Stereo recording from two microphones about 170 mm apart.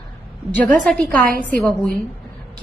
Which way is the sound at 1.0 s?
55° right (ahead or behind).